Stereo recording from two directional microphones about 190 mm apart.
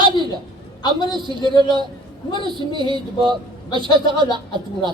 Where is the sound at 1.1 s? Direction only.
25° right (ahead or behind).